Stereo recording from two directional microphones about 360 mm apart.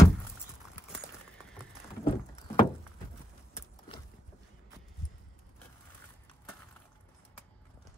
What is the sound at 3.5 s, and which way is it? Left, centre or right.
Clip-clop, centre.